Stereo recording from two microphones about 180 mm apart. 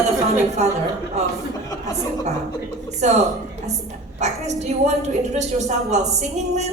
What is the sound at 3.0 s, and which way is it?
A woman's voice, 40° right (ahead or behind).